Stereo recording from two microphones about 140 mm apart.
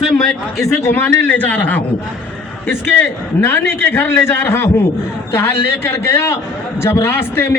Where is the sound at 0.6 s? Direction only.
5° left (ahead or behind).